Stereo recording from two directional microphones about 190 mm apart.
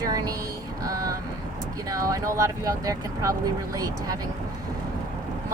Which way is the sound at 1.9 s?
20° right (ahead or behind).